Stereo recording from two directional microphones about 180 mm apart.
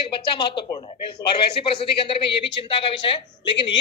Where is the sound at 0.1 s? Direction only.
25° left (ahead or behind).